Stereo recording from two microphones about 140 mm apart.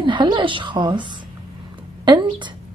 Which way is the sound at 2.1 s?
35° right (ahead or behind).